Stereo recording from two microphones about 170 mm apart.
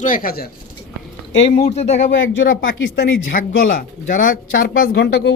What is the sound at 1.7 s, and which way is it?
Speech, 40° left (ahead or behind).